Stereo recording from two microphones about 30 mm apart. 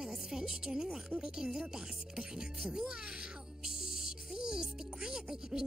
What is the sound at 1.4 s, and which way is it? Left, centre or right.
Speech, centre.